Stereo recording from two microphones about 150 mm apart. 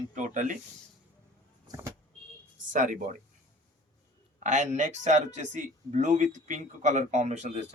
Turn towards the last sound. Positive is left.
turn(degrees=-50)  # may be behind; listen again after turning